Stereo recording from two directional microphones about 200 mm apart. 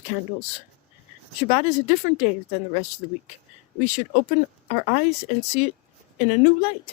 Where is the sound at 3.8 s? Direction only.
35° left (ahead or behind).